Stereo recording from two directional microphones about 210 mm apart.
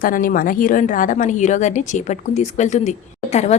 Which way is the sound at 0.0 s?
40° left (ahead or behind).